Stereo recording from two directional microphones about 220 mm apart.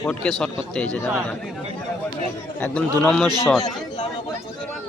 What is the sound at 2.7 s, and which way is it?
Speech, 5° left (ahead or behind).